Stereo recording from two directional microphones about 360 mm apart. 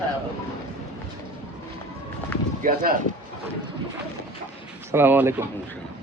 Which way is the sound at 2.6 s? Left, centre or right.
Right.